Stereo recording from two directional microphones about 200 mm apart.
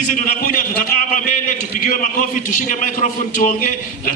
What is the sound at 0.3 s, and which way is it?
A man's voice, 45° left (ahead or behind).